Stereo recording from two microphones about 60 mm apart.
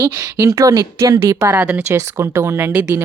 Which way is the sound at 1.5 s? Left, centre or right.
Right.